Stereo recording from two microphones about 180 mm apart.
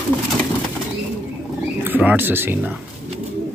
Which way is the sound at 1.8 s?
10° right (ahead or behind).